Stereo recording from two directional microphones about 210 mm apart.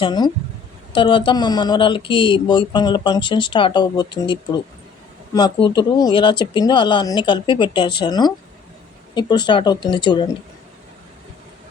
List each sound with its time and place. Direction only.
0.0 s speech: 20° left (ahead or behind)